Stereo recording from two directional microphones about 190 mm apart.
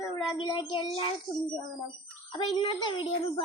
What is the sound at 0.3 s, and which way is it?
Speech, 25° left (ahead or behind).